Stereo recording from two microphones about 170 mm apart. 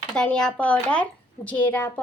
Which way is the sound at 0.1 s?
5° left (ahead or behind).